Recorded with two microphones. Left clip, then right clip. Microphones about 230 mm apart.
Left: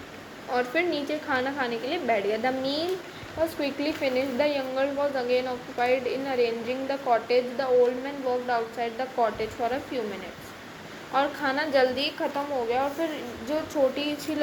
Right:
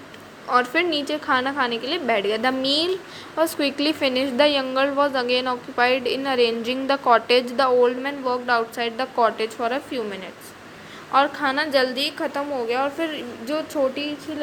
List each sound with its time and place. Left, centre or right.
0.5 s a woman's voice: right
11.1 s a woman's voice: right
13.5 s speech: centre